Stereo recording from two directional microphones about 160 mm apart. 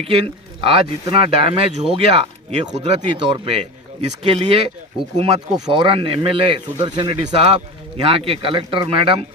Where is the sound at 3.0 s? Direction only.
30° right (ahead or behind).